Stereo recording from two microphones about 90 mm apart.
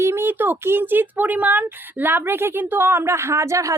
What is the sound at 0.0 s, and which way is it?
Speech, 25° right (ahead or behind).